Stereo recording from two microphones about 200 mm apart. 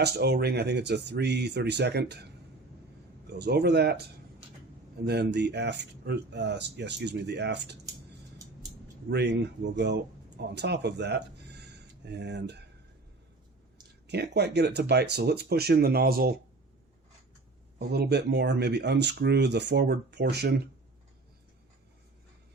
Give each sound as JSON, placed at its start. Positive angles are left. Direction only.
{"t": 0.0, "sound": "speech", "side_deg": -55}
{"t": 3.3, "sound": "speech", "side_deg": -55}
{"t": 5.0, "sound": "speech", "side_deg": -55}
{"t": 9.0, "sound": "speech", "side_deg": -55}
{"t": 14.1, "sound": "speech", "side_deg": -55}
{"t": 17.7, "sound": "speech", "side_deg": -55}